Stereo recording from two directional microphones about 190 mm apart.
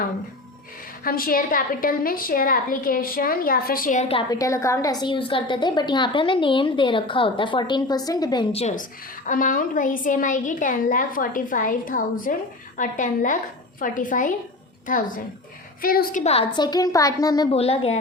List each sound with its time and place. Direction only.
1.0 s a woman's voice: 50° left (ahead or behind)
4.1 s a woman's voice: 20° left (ahead or behind)
8.6 s a woman's voice: 40° left (ahead or behind)
16.2 s a woman's voice: 30° left (ahead or behind)
17.5 s speech: 30° left (ahead or behind)